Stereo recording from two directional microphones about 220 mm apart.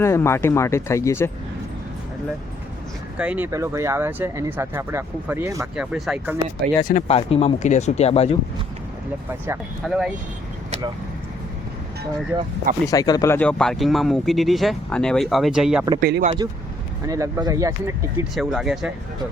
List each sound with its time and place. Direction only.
0.0 s speech: 10° left (ahead or behind)
3.2 s speech: 5° right (ahead or behind)
6.8 s speech: 30° left (ahead or behind)
9.8 s speech: 5° right (ahead or behind)
12.3 s speech: 15° right (ahead or behind)
12.9 s speech: 15° left (ahead or behind); by 15.9 s 5° right (ahead or behind)
16.0 s speech: 45° right (ahead or behind)
16.2 s speech: 25° right (ahead or behind)
18.3 s speech: centre (ahead or behind)